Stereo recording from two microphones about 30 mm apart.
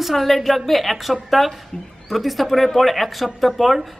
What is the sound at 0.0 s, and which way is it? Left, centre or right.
Speech, centre.